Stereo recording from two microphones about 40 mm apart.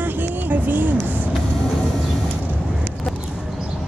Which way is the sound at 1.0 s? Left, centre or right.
Right.